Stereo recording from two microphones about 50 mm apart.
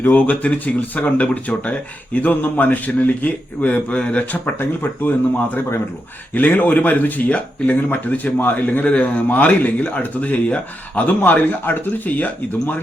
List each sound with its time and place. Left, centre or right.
0.0 s a man's voice: left
6.3 s a man's voice: left